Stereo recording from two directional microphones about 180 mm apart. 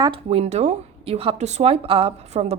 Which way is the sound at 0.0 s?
30° right (ahead or behind).